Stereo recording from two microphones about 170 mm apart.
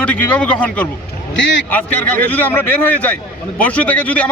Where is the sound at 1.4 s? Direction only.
90° left.